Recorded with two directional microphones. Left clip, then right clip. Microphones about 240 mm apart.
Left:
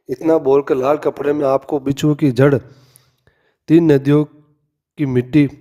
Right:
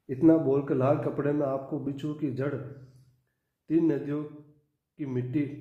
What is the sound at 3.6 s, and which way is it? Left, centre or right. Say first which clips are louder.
A man's voice: left 14 dB; left.